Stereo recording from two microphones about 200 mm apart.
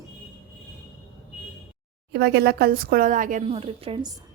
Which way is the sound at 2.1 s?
55° right (ahead or behind).